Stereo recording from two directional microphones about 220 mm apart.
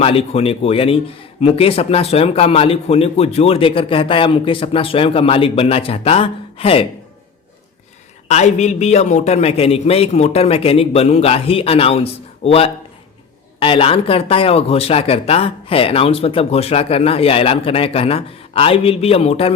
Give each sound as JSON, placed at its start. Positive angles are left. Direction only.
{"t": 0.0, "sound": "speech", "side_deg": 25}
{"t": 8.3, "sound": "speech", "side_deg": 30}